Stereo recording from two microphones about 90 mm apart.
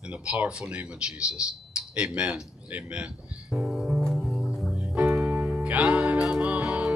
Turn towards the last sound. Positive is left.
turn(degrees=-10)  # may be behind; listen again after turning